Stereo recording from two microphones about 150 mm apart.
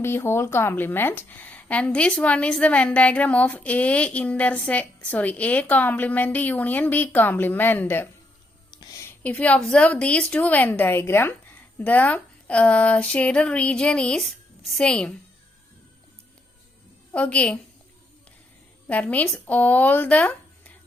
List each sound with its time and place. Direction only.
0.0 s a woman's voice: 15° left (ahead or behind)
17.2 s a woman's voice: 10° left (ahead or behind)
18.9 s a woman's voice: 10° left (ahead or behind)